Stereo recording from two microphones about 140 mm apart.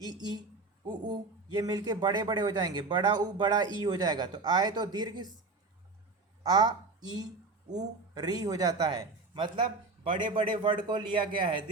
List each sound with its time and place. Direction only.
0.0 s a man's voice: 30° right (ahead or behind)
6.5 s a woman's voice: 30° right (ahead or behind)